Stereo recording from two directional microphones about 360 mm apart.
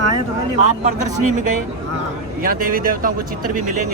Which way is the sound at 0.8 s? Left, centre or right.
Right.